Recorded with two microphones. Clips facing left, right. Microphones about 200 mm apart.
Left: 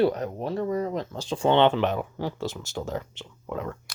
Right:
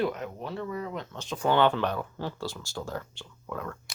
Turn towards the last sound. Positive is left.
turn(degrees=20)  # may be behind; listen again after turning